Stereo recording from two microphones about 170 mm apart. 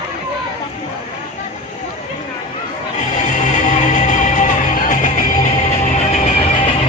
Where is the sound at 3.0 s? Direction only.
45° left (ahead or behind).